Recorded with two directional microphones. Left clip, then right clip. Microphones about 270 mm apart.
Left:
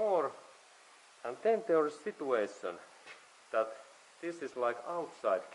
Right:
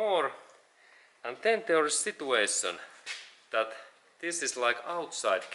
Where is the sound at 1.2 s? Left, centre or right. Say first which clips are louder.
Right 3 dB; centre.